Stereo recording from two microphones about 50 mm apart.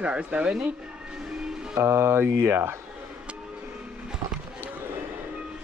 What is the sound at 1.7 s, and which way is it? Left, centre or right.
Music, right.